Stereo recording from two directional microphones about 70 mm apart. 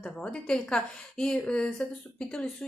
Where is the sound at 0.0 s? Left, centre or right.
Centre.